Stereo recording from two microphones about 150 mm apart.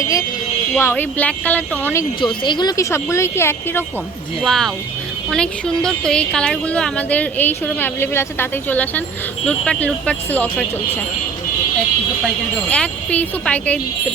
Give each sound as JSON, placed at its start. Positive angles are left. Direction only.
{"t": 0.8, "sound": "speech", "side_deg": 15}
{"t": 2.2, "sound": "speech", "side_deg": 30}
{"t": 4.4, "sound": "speech", "side_deg": 0}
{"t": 12.7, "sound": "speech", "side_deg": 10}